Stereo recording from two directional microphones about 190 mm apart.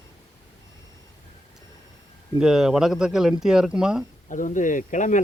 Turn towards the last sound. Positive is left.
turn(degrees=40)  # may be behind; listen again after turning